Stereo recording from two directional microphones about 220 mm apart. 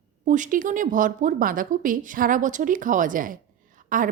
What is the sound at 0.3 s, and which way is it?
Speech, 35° right (ahead or behind).